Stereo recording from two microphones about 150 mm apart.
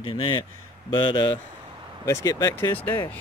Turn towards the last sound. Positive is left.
turn(degrees=15)  # may be behind; listen again after turning